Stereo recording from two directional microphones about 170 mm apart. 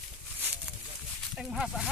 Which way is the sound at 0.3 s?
10° right (ahead or behind).